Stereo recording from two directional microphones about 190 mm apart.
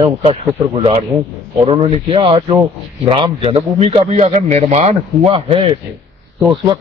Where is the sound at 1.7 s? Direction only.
30° right (ahead or behind).